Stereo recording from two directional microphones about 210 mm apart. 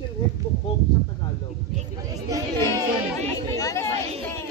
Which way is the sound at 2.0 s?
15° right (ahead or behind).